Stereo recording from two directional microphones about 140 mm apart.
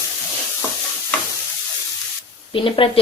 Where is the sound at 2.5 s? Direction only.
40° left (ahead or behind).